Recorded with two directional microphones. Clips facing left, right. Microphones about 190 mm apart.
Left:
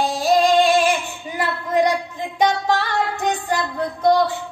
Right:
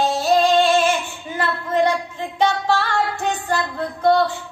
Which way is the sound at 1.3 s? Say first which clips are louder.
Even; 15° left (ahead or behind).